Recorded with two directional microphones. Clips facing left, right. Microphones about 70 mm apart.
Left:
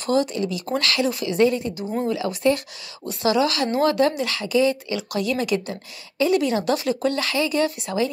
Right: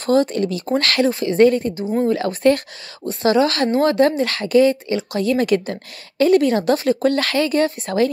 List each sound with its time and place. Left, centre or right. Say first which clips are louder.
0.0 s speech: right 5 dB; right